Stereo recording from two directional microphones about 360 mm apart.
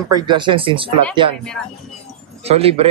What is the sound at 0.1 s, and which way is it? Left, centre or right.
Speech, centre.